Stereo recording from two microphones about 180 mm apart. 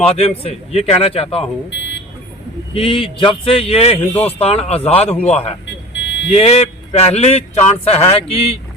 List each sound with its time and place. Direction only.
0.1 s speech: 35° left (ahead or behind)
2.7 s speech: 30° left (ahead or behind)
4.1 s a man's voice: 10° left (ahead or behind)
4.4 s speech: 35° left (ahead or behind)
5.9 s vehicle: 85° left
6.3 s speech: 35° left (ahead or behind)